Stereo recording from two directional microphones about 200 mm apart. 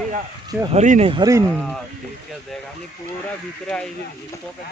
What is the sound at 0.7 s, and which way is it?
Speech, 35° right (ahead or behind).